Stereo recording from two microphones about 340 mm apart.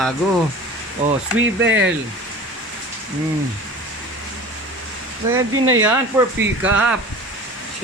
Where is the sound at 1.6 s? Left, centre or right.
Right.